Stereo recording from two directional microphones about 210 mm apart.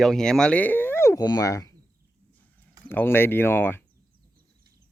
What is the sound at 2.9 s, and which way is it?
Speech, 10° left (ahead or behind).